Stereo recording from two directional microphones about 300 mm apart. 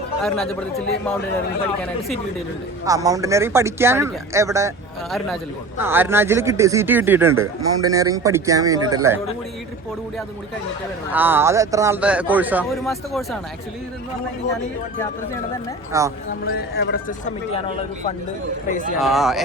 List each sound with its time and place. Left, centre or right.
2.8 s a man's voice: centre
11.1 s a man's voice: centre
15.9 s a man's voice: centre
16.5 s a man's voice: left
18.9 s a man's voice: centre